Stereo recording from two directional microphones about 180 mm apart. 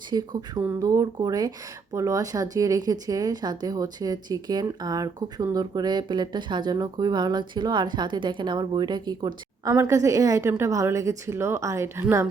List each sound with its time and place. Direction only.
0.1 s speech: 20° right (ahead or behind)